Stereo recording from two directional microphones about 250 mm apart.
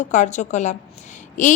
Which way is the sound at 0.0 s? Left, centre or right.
Left.